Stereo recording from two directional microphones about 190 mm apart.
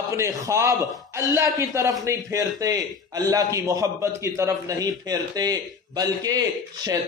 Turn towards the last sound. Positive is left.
turn(degrees=-20)  # may be behind; listen again after turning